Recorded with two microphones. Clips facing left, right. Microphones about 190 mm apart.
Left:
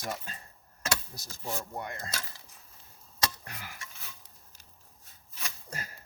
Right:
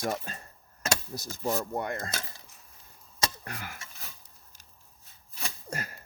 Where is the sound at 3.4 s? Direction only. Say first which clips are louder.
Right 5 dB; 55° right (ahead or behind).